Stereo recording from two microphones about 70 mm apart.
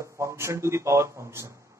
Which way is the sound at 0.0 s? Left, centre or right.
Right.